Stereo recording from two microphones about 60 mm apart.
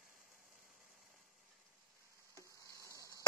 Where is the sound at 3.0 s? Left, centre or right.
Left.